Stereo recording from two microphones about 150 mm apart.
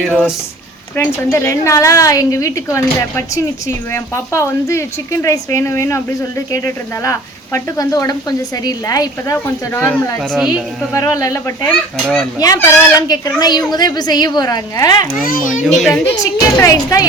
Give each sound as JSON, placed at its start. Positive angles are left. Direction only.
{"t": 0.0, "sound": "speech", "side_deg": 0}
{"t": 0.9, "sound": "a woman's voice", "side_deg": 15}
{"t": 10.3, "sound": "speech", "side_deg": -5}
{"t": 10.9, "sound": "a woman's voice", "side_deg": 20}
{"t": 11.7, "sound": "speech", "side_deg": 5}
{"t": 12.4, "sound": "a woman's voice", "side_deg": 20}